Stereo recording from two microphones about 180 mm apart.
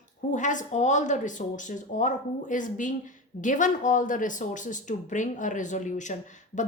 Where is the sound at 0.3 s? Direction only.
45° left (ahead or behind).